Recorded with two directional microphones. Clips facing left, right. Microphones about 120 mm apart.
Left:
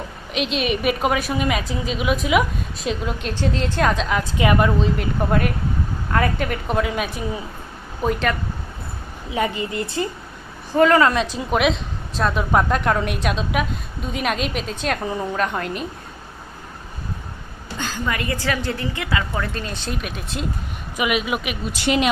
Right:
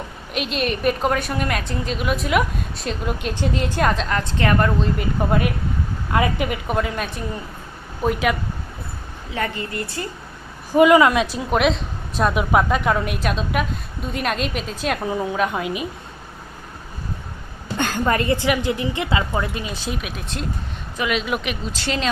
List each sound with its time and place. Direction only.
0.3 s a woman's voice: centre (ahead or behind)
3.2 s a woman's voice: 10° right (ahead or behind)
3.8 s a woman's voice: centre (ahead or behind)
9.3 s speech: 15° left (ahead or behind)
10.7 s a woman's voice: 10° right (ahead or behind)
12.1 s a woman's voice: 10° right (ahead or behind)
17.7 s a sound: 60° right (ahead or behind)
18.1 s a woman's voice: 35° right (ahead or behind)
18.3 s a woman's voice: 15° right (ahead or behind)
19.5 s a woman's voice: 5° right (ahead or behind)
20.9 s speech: 10° left (ahead or behind)